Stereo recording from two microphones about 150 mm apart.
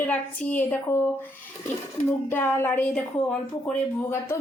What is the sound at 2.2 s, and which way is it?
A woman's voice, 15° left (ahead or behind).